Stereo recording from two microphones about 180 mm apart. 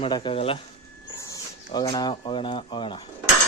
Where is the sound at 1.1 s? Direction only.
20° left (ahead or behind).